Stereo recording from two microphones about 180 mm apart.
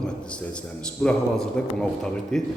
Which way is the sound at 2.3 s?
Centre (ahead or behind).